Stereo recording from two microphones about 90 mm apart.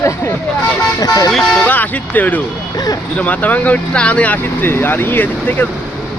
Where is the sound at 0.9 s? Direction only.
45° left (ahead or behind).